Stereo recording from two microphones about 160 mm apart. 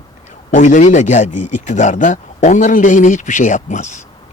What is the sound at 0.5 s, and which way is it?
A man's voice, 50° left (ahead or behind).